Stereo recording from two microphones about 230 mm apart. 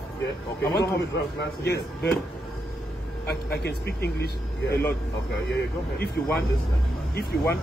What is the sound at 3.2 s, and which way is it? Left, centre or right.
Speech, left.